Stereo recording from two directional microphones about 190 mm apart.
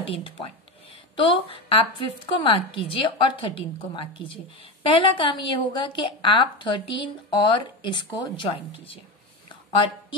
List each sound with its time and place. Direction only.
0.0 s a woman's voice: 25° left (ahead or behind)